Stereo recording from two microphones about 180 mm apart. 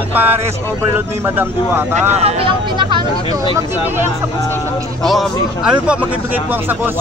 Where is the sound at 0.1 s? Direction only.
10° right (ahead or behind).